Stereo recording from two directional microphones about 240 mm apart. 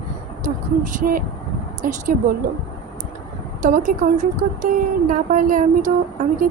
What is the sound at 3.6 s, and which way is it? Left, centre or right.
A woman's voice, right.